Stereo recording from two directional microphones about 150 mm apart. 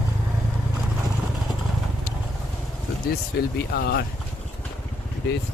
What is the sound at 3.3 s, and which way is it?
Speech, 90° left.